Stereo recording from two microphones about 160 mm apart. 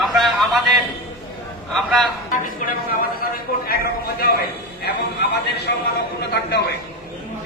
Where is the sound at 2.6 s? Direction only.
55° left (ahead or behind).